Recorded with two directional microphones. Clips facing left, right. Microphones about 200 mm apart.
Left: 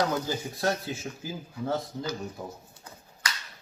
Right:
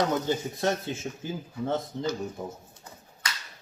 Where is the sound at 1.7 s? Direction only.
25° right (ahead or behind).